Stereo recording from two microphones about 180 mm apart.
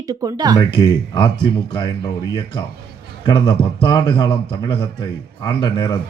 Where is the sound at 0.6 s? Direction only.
25° left (ahead or behind).